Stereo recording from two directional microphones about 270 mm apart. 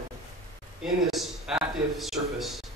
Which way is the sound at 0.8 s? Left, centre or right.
Centre.